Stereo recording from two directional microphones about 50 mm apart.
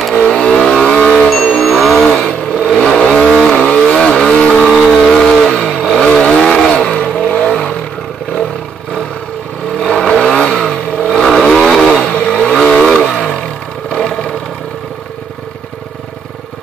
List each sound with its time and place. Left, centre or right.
0.1 s vehicle: centre
1.6 s vehicle: centre
2.3 s vehicle: centre
9.8 s vehicle: centre